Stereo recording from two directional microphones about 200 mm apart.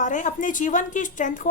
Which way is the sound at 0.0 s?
40° left (ahead or behind).